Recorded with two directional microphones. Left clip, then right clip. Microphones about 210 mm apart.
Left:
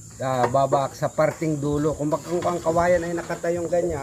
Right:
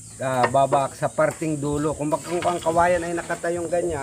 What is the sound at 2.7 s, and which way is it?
Speech, centre (ahead or behind).